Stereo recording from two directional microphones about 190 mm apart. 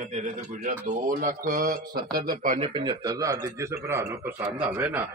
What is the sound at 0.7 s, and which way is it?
Speech, 45° right (ahead or behind).